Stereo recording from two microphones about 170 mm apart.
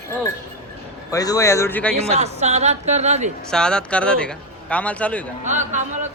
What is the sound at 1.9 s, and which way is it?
Speech, 40° right (ahead or behind).